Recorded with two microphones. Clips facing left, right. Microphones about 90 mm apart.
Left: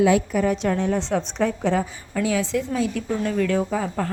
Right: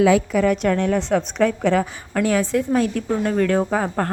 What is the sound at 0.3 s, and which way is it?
A woman's voice, 70° right (ahead or behind).